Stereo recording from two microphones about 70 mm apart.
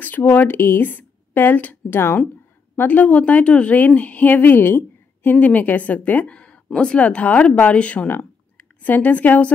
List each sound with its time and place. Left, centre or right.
0.0 s a woman's voice: left